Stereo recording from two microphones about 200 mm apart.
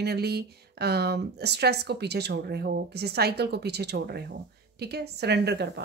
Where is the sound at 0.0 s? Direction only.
55° right (ahead or behind).